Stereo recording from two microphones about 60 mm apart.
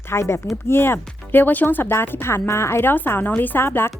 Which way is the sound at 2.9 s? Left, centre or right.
Left.